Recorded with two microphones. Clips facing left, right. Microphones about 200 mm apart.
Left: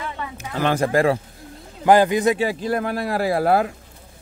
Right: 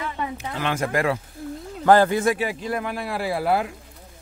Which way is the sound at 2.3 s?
35° left (ahead or behind).